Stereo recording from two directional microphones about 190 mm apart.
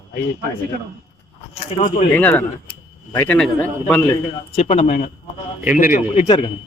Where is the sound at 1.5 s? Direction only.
35° left (ahead or behind).